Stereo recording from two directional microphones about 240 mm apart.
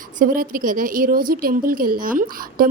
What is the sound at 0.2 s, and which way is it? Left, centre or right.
A woman's voice, right.